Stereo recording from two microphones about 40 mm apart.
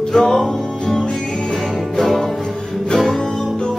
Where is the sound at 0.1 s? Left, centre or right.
Centre.